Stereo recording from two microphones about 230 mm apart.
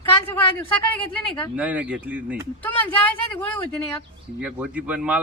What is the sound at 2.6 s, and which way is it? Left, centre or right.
Speech, centre.